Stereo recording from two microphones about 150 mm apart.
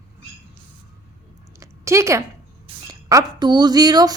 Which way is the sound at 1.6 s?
20° right (ahead or behind).